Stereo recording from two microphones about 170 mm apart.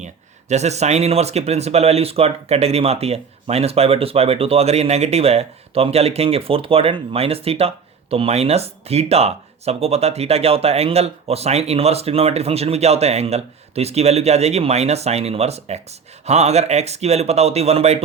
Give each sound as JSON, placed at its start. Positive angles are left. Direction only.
{"t": 0.0, "sound": "speech", "side_deg": -40}